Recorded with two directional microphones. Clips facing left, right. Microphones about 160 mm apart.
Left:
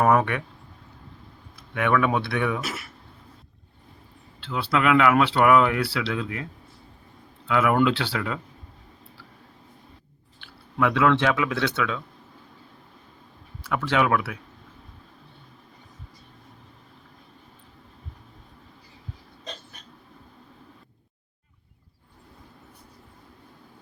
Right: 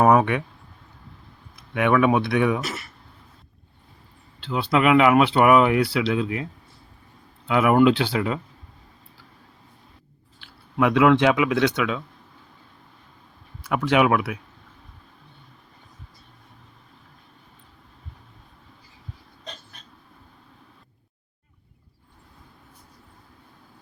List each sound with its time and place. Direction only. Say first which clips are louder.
0.0 s a sound: right 3 dB; 15° right (ahead or behind)
1.7 s speech: right 4 dB; 20° right (ahead or behind)
2.6 s speech: right 2 dB; centre (ahead or behind)
4.4 s speech: right 3 dB; 15° right (ahead or behind)
7.4 s speech: right 4 dB; 20° right (ahead or behind)
10.8 s speech: right 4 dB; 20° right (ahead or behind)
13.7 s speech: right 3 dB; 15° right (ahead or behind)